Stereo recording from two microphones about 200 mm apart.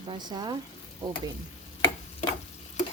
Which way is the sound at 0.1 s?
20° right (ahead or behind).